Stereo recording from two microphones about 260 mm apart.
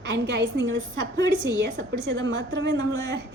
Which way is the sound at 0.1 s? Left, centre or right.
Right.